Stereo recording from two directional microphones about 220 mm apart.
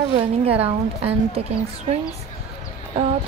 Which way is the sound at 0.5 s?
25° right (ahead or behind).